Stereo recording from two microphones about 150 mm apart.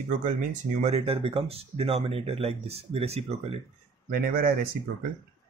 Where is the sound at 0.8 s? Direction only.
40° right (ahead or behind).